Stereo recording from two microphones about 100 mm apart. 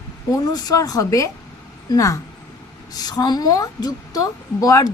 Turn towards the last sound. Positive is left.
turn(degrees=35)  # may be behind; listen again after turning